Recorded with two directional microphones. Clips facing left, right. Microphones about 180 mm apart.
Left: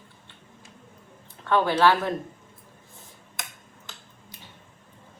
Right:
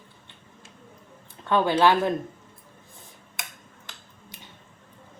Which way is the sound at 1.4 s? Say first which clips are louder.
Even; 15° right (ahead or behind).